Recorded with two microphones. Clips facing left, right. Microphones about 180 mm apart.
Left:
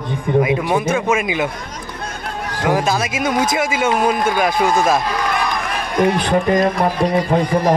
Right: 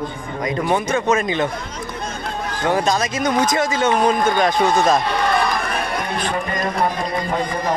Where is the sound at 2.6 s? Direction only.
10° left (ahead or behind).